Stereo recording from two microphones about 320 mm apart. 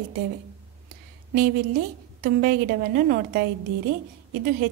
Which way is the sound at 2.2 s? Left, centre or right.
Right.